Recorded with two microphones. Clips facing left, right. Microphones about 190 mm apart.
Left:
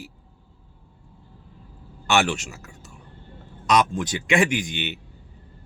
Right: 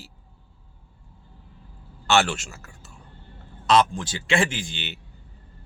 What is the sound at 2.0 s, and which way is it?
Speech, 15° left (ahead or behind).